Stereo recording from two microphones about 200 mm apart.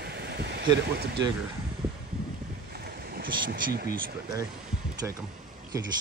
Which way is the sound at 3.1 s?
45° right (ahead or behind).